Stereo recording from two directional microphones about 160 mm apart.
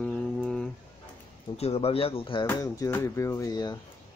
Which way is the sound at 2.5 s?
20° left (ahead or behind).